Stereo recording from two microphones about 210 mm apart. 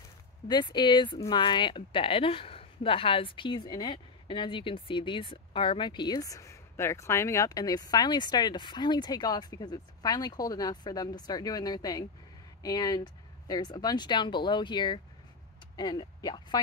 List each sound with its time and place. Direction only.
0.5 s speech: 20° left (ahead or behind)